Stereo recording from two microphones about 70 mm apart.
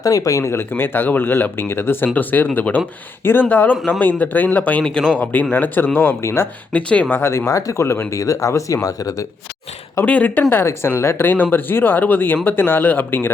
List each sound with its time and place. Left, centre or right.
0.0 s speech: left
0.7 s speech: left
4.8 s speech: centre; by 6.5 s left
6.7 s speech: centre
7.1 s speech: left
8.2 s speech: left
10.1 s speech: left
10.5 s speech: left